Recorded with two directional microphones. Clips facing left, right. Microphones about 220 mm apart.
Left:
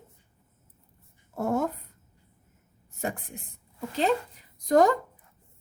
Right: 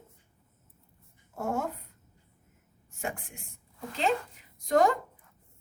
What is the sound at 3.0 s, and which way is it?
Speech, 35° left (ahead or behind).